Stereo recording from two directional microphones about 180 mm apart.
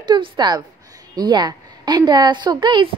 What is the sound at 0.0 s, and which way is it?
A woman's voice, 25° right (ahead or behind).